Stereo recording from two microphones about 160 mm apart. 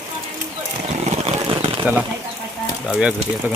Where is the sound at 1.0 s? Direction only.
40° right (ahead or behind).